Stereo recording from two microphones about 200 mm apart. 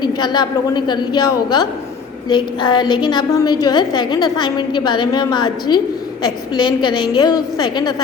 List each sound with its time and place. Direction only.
0.0 s a woman's voice: 20° left (ahead or behind)